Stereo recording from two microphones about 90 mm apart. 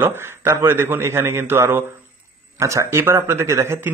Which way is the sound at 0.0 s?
25° right (ahead or behind).